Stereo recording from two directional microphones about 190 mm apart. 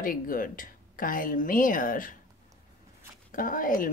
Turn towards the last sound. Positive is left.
turn(degrees=45)  # may be behind; listen again after turning